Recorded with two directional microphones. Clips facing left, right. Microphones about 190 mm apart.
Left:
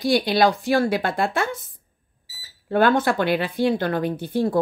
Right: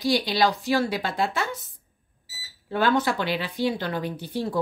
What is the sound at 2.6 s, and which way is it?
Speech, 55° left (ahead or behind).